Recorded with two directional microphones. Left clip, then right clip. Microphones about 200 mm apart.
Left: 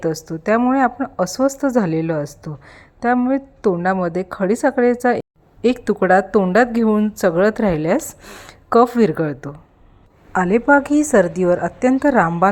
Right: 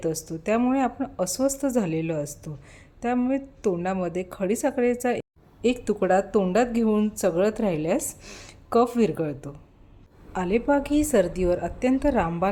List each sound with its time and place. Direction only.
0.0 s a woman's voice: 15° left (ahead or behind)